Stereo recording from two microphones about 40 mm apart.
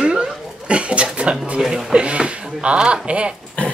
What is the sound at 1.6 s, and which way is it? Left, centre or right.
Speech, centre.